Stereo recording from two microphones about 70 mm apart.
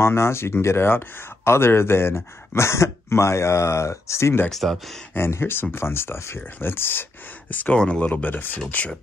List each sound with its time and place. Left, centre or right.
0.0 s speech: left
4.5 s speech: centre
5.1 s speech: left